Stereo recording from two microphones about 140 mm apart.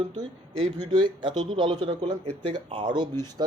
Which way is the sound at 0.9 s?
30° right (ahead or behind).